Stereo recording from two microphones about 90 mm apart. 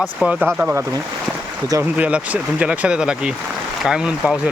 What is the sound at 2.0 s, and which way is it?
Speech, 15° right (ahead or behind).